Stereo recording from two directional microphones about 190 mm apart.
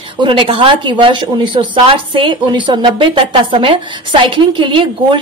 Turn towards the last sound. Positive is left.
turn(degrees=-25)  # may be behind; listen again after turning